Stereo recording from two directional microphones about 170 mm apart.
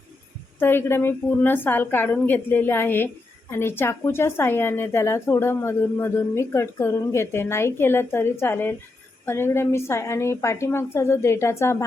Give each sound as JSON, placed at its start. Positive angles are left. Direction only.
{"t": 0.6, "sound": "a woman's voice", "side_deg": 15}